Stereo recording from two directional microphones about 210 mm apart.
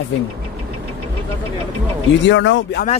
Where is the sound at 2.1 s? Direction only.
60° left (ahead or behind).